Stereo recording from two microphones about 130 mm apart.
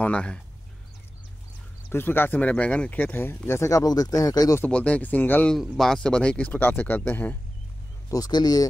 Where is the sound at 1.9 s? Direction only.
15° left (ahead or behind).